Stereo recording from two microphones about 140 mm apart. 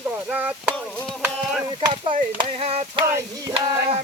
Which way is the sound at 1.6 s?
35° right (ahead or behind).